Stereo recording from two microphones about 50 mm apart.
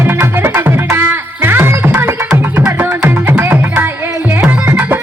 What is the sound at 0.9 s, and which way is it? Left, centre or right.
Music, right.